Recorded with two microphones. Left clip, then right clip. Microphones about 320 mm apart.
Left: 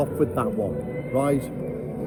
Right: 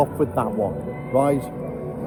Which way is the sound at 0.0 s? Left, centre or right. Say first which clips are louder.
Right 3 dB; centre.